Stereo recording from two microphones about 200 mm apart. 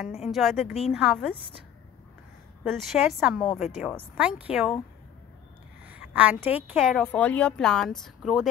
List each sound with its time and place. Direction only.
0.0 s a woman's voice: centre (ahead or behind)
2.6 s a woman's voice: centre (ahead or behind)
5.9 s a woman's voice: 5° right (ahead or behind)